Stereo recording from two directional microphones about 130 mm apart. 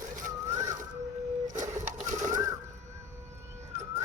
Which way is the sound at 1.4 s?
75° right (ahead or behind).